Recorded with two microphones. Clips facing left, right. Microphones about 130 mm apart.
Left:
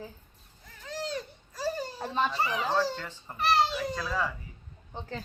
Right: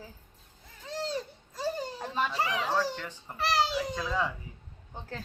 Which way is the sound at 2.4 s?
90° right.